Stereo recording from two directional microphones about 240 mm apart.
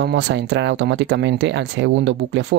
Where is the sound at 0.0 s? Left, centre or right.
Right.